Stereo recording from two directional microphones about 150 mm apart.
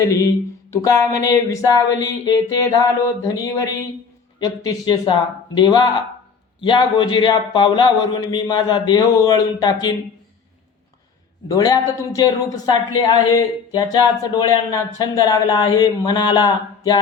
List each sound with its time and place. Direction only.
0.7 s speech: 20° left (ahead or behind)
11.4 s speech: 25° left (ahead or behind)